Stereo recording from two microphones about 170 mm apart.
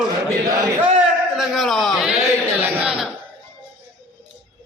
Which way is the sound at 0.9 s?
Centre (ahead or behind).